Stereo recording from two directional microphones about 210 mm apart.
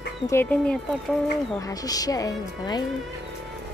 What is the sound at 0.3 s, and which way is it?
Speech, 10° left (ahead or behind).